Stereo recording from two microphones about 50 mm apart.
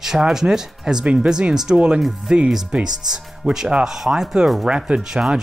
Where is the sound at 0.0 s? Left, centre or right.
Centre.